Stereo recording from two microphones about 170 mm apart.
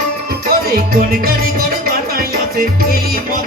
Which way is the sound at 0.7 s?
60° right (ahead or behind).